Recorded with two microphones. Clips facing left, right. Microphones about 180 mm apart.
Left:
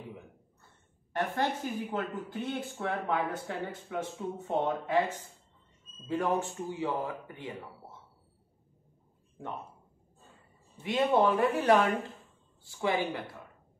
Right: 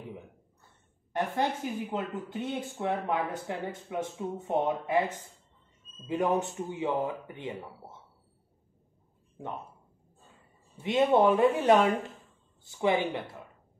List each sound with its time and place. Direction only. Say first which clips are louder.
1.1 s speech: right 1 dB; 20° right (ahead or behind)
10.8 s speech: right 3 dB; 25° right (ahead or behind)